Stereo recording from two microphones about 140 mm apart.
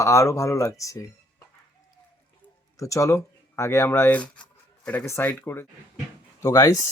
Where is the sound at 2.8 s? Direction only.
20° left (ahead or behind).